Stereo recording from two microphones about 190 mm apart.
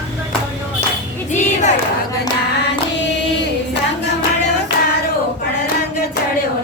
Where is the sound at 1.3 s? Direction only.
40° left (ahead or behind).